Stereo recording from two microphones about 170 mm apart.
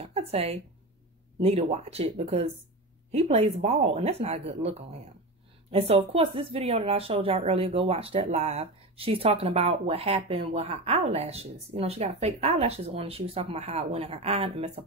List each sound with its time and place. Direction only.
0.0 s speech: 35° right (ahead or behind)